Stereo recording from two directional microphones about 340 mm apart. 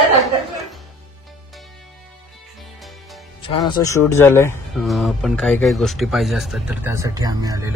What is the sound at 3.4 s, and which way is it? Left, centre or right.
Speech, centre.